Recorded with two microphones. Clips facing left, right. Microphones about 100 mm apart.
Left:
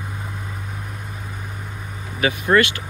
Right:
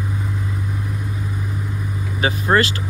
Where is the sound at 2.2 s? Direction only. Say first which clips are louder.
Even; 30° right (ahead or behind).